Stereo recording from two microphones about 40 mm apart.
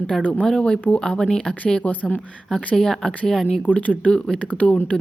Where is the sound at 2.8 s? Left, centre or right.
Centre.